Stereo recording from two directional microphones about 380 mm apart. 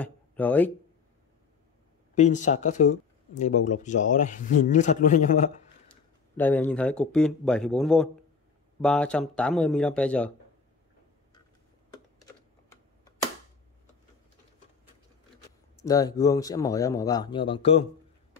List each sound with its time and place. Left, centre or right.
0.0 s speech: centre
2.4 s speech: centre
5.9 s speech: centre
11.9 s typing: centre
15.7 s speech: centre